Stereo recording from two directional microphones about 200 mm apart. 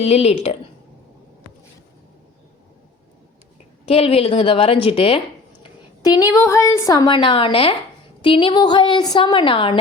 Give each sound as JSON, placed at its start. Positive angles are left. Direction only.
{"t": 0.0, "sound": "speech", "side_deg": 30}
{"t": 3.8, "sound": "a woman's voice", "side_deg": 30}